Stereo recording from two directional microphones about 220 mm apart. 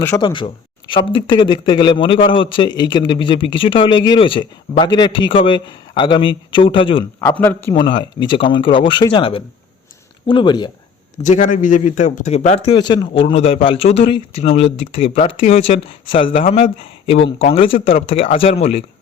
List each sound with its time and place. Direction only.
0.2 s a man's voice: 20° left (ahead or behind)
7.2 s a man's voice: 10° left (ahead or behind)
7.8 s a man's voice: 20° left (ahead or behind)
11.2 s a man's voice: 35° left (ahead or behind)